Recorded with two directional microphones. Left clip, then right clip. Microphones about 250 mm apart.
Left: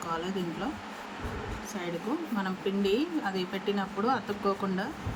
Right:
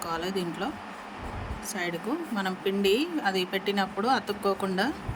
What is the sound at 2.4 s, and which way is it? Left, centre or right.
Speech, right.